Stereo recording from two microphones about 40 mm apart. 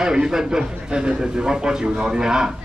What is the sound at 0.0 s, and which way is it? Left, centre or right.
Speech, centre.